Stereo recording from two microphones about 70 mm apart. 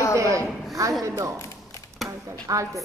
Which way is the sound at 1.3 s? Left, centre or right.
Left.